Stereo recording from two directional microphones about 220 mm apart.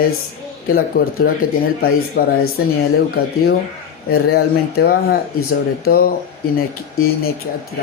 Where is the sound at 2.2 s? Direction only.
40° left (ahead or behind).